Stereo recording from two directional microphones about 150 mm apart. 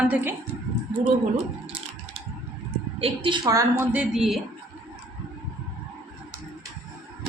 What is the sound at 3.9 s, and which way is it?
Speech, 5° right (ahead or behind).